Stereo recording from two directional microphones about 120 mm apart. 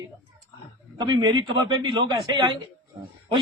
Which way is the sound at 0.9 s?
40° right (ahead or behind).